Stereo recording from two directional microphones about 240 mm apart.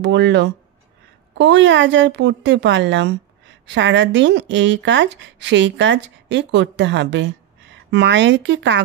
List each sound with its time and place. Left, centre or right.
0.0 s speech: right